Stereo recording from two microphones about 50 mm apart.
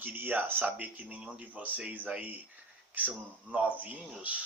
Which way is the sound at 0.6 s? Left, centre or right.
Right.